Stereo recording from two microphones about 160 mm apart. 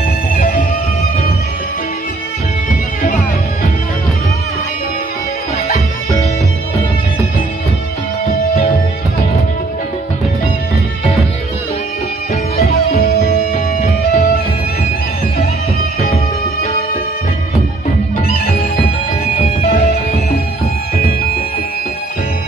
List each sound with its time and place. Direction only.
0.3 s music: 60° left (ahead or behind)
12.5 s music: 70° left (ahead or behind)
19.9 s music: 70° left (ahead or behind)